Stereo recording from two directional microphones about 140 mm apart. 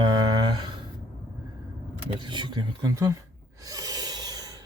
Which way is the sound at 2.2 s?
35° right (ahead or behind).